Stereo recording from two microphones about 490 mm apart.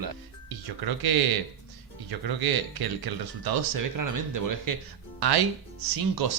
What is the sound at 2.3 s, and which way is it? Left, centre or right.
A man's voice, right.